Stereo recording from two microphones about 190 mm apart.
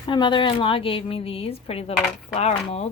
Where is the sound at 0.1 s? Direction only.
25° left (ahead or behind).